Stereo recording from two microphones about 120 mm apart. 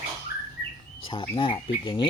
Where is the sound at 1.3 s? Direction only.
45° left (ahead or behind).